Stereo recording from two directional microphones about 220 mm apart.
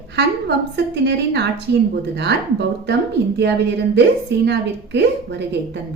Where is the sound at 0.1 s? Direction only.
50° right (ahead or behind).